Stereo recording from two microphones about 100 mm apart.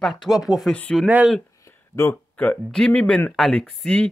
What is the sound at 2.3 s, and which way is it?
Speech, 15° left (ahead or behind).